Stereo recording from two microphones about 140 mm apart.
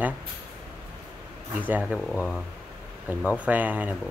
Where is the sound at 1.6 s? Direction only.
10° right (ahead or behind).